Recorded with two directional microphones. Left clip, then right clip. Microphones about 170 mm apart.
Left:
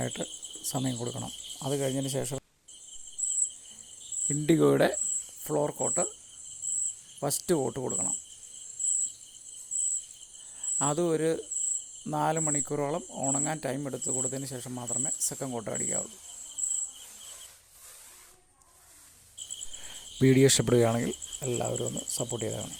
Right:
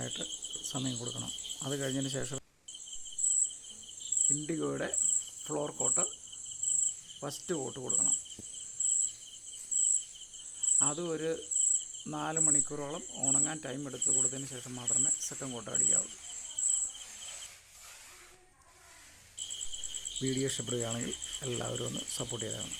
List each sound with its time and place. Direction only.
0.0 s cricket: 35° left (ahead or behind)
1.7 s speech: 20° left (ahead or behind)
4.3 s speech: 45° left (ahead or behind)
5.5 s speech: 25° left (ahead or behind)
7.2 s speech: 30° left (ahead or behind)
10.8 s cricket: 35° left (ahead or behind)
12.1 s speech: 35° left (ahead or behind)
20.1 s speech: 50° left (ahead or behind)
21.4 s speech: 20° left (ahead or behind)
22.0 s cricket: 15° left (ahead or behind)
22.4 s speech: 30° left (ahead or behind)